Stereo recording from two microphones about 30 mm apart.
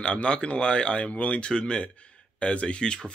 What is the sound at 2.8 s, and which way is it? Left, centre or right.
Speech, left.